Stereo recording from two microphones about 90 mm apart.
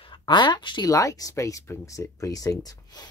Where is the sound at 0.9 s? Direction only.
35° left (ahead or behind).